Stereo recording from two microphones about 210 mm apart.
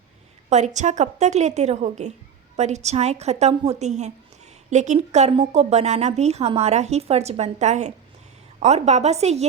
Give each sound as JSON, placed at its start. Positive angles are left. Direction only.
{"t": 0.5, "sound": "a woman's voice", "side_deg": -35}